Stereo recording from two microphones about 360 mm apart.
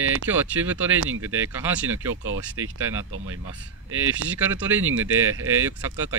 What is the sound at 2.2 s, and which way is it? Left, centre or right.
Speech, right.